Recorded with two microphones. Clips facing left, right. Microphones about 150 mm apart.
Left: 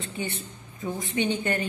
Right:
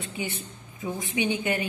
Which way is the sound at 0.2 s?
10° right (ahead or behind).